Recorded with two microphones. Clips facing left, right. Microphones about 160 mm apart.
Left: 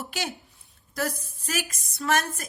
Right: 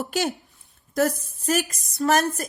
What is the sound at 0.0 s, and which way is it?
A woman's voice, 45° right (ahead or behind).